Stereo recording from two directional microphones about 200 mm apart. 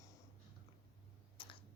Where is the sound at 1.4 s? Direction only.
25° left (ahead or behind).